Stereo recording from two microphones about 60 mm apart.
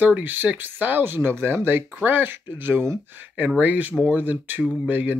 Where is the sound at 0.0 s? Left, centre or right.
Right.